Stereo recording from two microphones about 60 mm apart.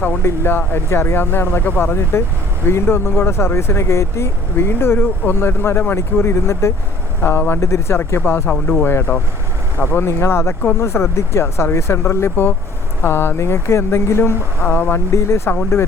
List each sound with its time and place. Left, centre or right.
0.2 s speech: left
7.2 s speech: left
8.4 s speech: left
8.8 s speech: left
14.6 s speech: left